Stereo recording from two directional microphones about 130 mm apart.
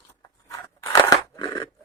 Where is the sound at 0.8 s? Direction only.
30° left (ahead or behind).